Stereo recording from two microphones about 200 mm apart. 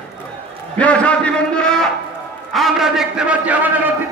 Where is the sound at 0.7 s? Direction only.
5° left (ahead or behind).